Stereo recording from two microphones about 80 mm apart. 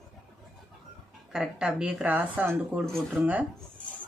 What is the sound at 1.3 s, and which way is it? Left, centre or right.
A woman's voice, centre.